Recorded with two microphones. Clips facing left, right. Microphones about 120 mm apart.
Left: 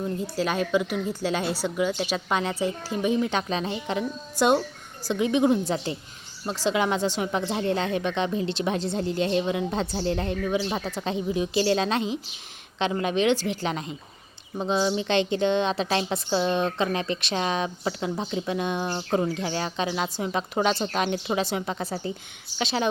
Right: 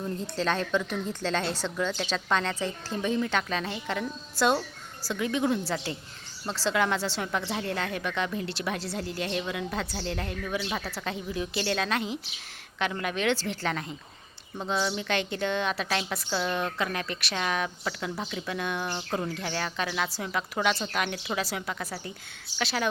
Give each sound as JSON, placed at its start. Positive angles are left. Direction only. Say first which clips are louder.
{"t": 0.0, "sound": "a woman's voice", "louder": "left 3 dB", "side_deg": 10}